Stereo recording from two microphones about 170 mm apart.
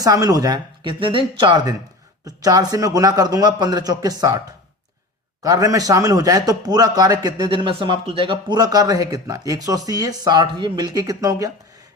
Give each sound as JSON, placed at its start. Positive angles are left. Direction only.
{"t": 0.0, "sound": "a man's voice", "side_deg": -20}
{"t": 5.4, "sound": "a man's voice", "side_deg": -20}